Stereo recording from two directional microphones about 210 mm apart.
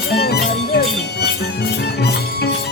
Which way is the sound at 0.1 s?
50° left (ahead or behind).